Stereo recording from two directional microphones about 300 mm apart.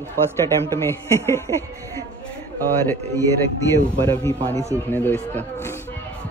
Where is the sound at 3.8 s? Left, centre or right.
Centre.